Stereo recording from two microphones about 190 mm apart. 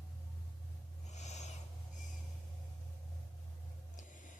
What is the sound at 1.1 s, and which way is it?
Owl, 35° left (ahead or behind).